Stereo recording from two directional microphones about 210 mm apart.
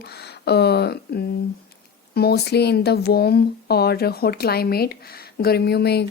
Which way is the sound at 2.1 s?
50° left (ahead or behind).